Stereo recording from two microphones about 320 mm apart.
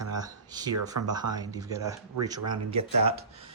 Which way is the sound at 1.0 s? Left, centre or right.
Right.